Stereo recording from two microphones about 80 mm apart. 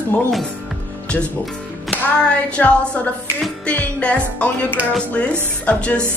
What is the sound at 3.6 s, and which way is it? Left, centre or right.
Music, centre.